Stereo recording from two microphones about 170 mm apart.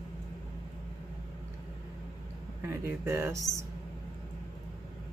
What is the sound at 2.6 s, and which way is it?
Speech, 15° right (ahead or behind).